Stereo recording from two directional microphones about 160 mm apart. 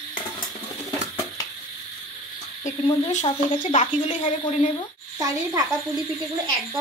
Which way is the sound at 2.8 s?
35° left (ahead or behind).